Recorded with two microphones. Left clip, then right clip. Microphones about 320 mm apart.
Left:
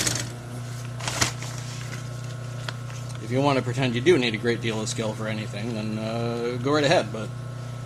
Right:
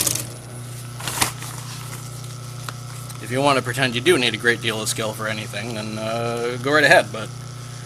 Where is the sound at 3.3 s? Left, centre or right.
Right.